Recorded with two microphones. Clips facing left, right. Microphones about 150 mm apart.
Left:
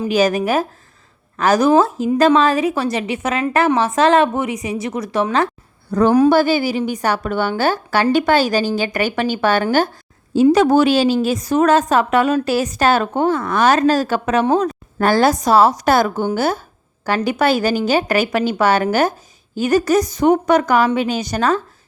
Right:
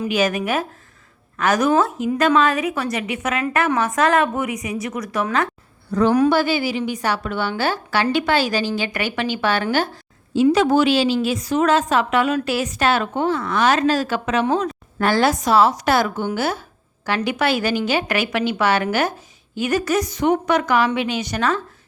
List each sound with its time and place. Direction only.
0.0 s a woman's voice: 35° left (ahead or behind)
5.9 s a woman's voice: 45° left (ahead or behind)